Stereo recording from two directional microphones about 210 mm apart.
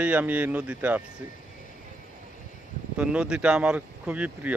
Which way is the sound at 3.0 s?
5° right (ahead or behind).